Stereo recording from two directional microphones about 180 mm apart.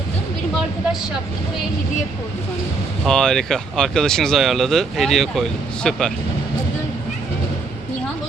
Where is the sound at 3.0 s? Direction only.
5° left (ahead or behind).